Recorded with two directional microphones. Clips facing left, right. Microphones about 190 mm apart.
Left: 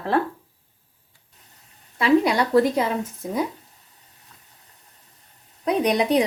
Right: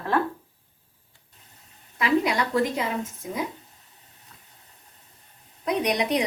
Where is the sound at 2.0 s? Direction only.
35° left (ahead or behind).